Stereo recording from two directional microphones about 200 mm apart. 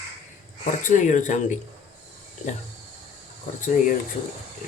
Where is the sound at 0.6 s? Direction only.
40° left (ahead or behind).